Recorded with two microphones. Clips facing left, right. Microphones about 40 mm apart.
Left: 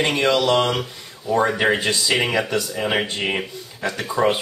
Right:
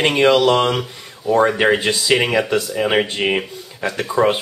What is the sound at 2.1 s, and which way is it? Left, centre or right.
Speech, centre.